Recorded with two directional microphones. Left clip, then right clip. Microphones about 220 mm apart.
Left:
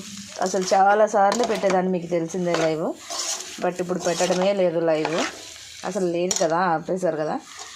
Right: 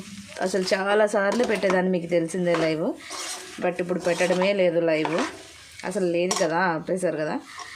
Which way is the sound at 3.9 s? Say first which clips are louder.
Even; 5° right (ahead or behind).